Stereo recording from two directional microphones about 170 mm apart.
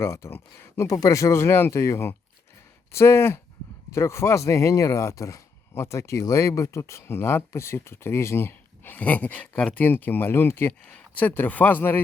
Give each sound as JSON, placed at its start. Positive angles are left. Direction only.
{"t": 0.0, "sound": "speech", "side_deg": 15}